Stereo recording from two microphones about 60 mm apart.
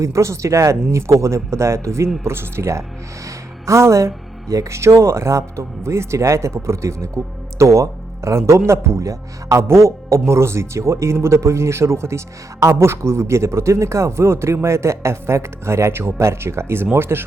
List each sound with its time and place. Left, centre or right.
0.0 s a man's voice: right